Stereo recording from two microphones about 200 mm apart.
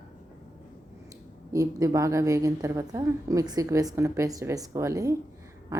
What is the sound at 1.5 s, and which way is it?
A woman's voice, 15° right (ahead or behind).